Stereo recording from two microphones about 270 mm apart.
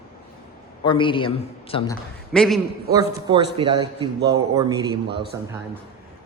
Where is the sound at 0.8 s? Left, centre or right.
Centre.